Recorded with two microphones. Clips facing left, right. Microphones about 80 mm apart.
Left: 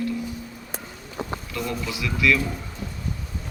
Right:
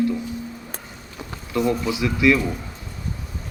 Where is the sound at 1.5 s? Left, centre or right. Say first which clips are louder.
Right 13 dB; right.